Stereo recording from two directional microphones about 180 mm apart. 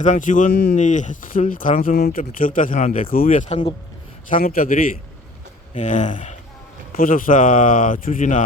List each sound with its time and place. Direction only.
0.0 s a man's voice: 45° left (ahead or behind)
0.5 s speech: 65° left (ahead or behind)
0.8 s a man's voice: 45° left (ahead or behind)
3.2 s speech: 35° left (ahead or behind)
4.3 s a man's voice: 50° left (ahead or behind)